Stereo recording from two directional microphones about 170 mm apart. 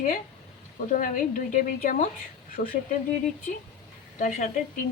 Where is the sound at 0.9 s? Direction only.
55° left (ahead or behind).